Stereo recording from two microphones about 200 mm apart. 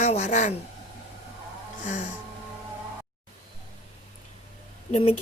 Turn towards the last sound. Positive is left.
turn(degrees=30)  # may be behind; listen again after turning